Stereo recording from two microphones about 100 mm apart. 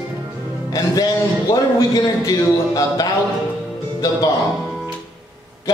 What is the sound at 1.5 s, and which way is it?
A man's voice, 40° left (ahead or behind).